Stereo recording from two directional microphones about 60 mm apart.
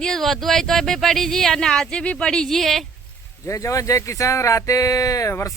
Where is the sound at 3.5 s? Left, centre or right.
Left.